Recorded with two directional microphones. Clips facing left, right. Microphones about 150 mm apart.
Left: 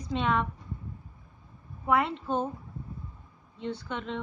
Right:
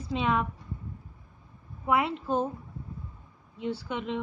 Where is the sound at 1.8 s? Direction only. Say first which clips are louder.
Even; 5° right (ahead or behind).